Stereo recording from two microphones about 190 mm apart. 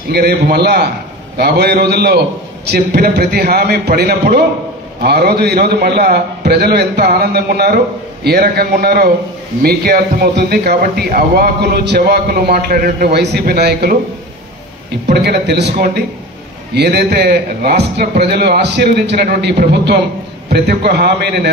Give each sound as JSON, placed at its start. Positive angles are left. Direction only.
{"t": 0.1, "sound": "a man's voice", "side_deg": -55}
{"t": 15.2, "sound": "a man's voice", "side_deg": -60}
{"t": 19.2, "sound": "a man's voice", "side_deg": -50}